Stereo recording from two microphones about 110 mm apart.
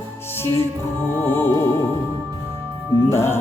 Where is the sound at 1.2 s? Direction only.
15° left (ahead or behind).